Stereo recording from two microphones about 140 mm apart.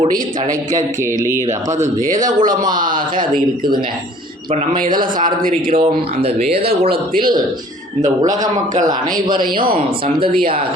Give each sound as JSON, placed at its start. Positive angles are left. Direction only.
{"t": 2.0, "sound": "speech", "side_deg": -70}
{"t": 4.9, "sound": "speech", "side_deg": -85}
{"t": 5.8, "sound": "speech", "side_deg": -45}
{"t": 7.2, "sound": "a man's voice", "side_deg": -35}
{"t": 8.4, "sound": "speech", "side_deg": -65}
{"t": 8.9, "sound": "a man's voice", "side_deg": -30}